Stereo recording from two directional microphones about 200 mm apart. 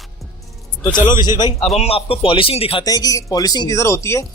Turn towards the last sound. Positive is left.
turn(degrees=15)  # may be behind; listen again after turning